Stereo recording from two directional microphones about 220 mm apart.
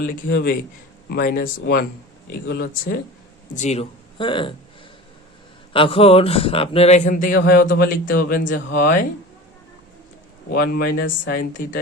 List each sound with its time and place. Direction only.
0.2 s speech: 40° left (ahead or behind)
3.5 s speech: 30° left (ahead or behind)
5.7 s speech: 25° left (ahead or behind); by 8.9 s 45° left (ahead or behind)
10.5 s speech: 45° left (ahead or behind)